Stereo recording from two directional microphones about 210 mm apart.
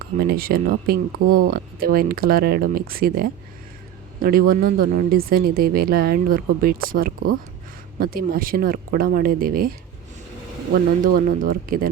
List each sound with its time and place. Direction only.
0.3 s speech: 45° right (ahead or behind)
11.0 s speech: 40° right (ahead or behind)